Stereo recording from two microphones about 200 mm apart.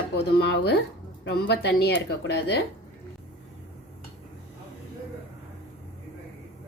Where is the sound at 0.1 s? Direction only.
55° left (ahead or behind).